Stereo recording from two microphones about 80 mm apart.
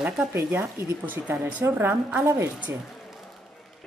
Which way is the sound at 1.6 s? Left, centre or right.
Right.